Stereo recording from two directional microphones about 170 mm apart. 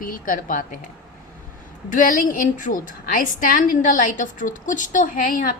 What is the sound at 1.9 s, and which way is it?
A woman's voice, 50° left (ahead or behind).